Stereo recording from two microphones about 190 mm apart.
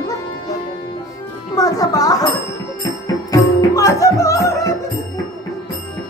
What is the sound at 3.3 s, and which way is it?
Music, 15° left (ahead or behind).